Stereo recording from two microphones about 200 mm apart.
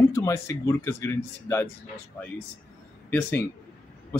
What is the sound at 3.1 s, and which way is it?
Speech, 10° left (ahead or behind).